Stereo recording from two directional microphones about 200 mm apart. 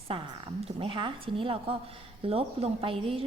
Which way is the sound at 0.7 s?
25° right (ahead or behind).